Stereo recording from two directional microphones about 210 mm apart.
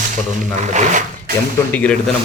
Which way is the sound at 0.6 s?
35° right (ahead or behind).